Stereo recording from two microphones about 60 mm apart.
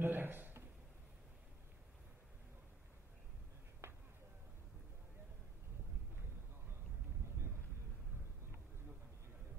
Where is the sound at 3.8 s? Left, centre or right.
Right.